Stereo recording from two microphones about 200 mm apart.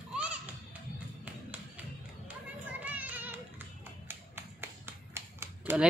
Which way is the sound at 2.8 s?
10° right (ahead or behind).